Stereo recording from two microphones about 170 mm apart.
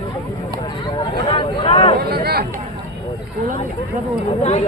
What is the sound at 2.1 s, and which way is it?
Speech, 65° right (ahead or behind).